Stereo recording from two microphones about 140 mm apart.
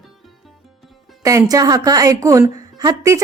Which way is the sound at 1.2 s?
25° right (ahead or behind).